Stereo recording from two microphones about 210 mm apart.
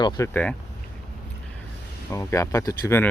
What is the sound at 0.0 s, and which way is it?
Speech, 20° left (ahead or behind).